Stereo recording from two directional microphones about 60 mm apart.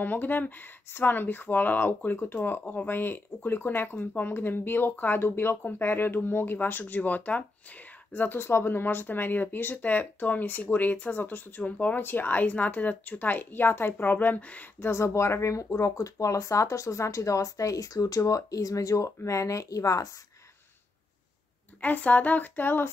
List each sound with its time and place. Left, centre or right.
0.0 s speech: left
14.9 s speech: left
21.8 s speech: left